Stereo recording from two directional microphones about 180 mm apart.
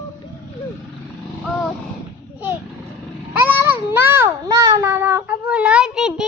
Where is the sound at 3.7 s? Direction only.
10° right (ahead or behind).